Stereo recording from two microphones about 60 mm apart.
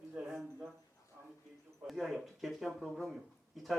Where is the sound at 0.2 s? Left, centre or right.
Right.